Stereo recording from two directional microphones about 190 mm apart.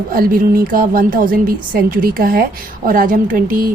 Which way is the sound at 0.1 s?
50° right (ahead or behind).